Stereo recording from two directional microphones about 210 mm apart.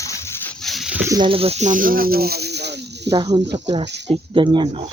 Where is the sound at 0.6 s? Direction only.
Centre (ahead or behind).